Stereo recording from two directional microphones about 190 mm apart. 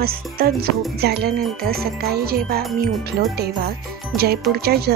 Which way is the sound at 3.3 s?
55° right (ahead or behind).